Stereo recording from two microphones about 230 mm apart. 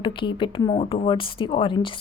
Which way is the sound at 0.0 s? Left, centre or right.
Left.